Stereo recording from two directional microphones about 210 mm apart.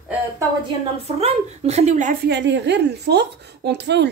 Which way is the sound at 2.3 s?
55° right (ahead or behind).